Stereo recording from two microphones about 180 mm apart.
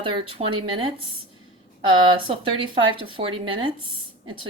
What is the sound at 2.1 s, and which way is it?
Speech, 25° right (ahead or behind).